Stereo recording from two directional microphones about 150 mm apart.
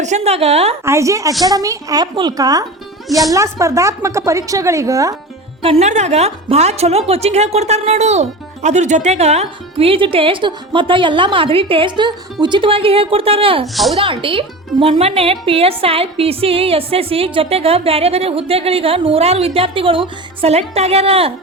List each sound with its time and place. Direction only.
0.0 s a woman's voice: 50° right (ahead or behind)
0.9 s a woman's voice: 20° right (ahead or behind)
5.6 s a woman's voice: 45° right (ahead or behind)